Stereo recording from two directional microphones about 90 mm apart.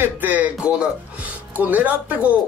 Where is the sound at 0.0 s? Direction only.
20° right (ahead or behind).